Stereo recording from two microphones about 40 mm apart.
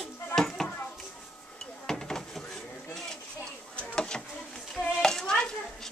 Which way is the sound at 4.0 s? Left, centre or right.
Centre.